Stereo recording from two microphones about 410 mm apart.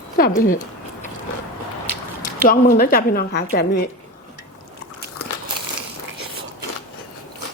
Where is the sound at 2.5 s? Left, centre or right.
Left.